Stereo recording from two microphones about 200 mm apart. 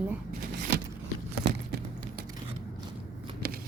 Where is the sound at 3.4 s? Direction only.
50° right (ahead or behind).